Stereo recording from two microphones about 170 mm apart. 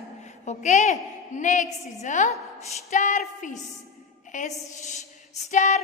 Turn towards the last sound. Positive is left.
turn(degrees=45)  # may be behind; listen again after turning